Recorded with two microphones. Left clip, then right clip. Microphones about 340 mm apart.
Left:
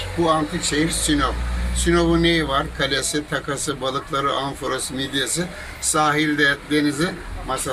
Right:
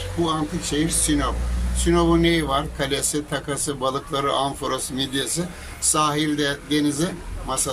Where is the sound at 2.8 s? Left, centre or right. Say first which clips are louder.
Left 3 dB; right.